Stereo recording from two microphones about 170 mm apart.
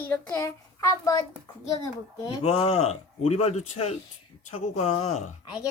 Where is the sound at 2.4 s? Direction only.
35° left (ahead or behind).